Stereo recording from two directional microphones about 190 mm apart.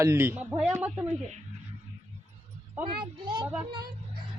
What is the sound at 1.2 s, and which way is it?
Speech, 35° right (ahead or behind).